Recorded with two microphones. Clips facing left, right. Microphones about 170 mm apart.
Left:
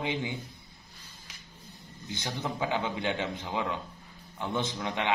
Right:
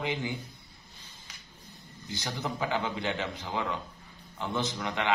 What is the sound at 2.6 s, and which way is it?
A man's voice, 20° left (ahead or behind).